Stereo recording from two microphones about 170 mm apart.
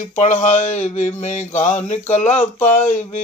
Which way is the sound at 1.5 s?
45° left (ahead or behind).